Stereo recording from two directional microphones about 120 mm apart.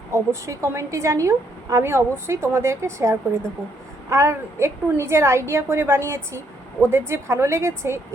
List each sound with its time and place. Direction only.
0.1 s a woman's voice: 25° right (ahead or behind)